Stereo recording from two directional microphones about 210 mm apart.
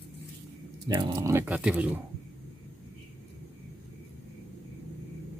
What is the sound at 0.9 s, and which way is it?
Speech, 15° right (ahead or behind).